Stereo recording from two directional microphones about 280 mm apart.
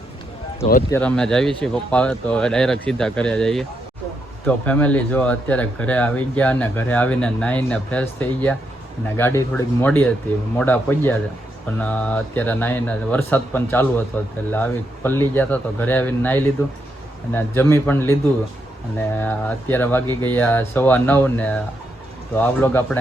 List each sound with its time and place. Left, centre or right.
0.9 s speech: centre